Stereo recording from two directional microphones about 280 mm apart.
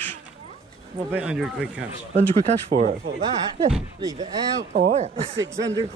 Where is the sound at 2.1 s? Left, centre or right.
Right.